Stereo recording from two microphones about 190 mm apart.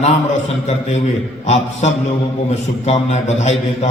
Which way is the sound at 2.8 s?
35° left (ahead or behind).